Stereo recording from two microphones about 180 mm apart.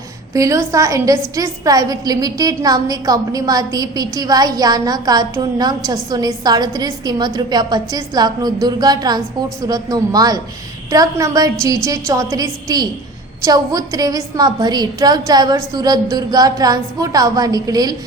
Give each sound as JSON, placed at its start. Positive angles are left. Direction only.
{"t": 0.3, "sound": "a woman's voice", "side_deg": -15}